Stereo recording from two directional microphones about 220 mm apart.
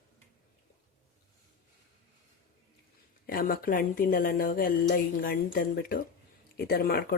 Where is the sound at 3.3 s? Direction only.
40° left (ahead or behind).